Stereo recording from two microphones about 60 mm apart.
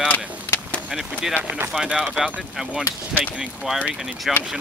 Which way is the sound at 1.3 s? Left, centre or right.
Right.